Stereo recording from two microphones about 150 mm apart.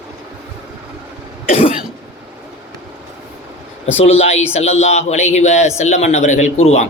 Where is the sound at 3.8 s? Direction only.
45° left (ahead or behind).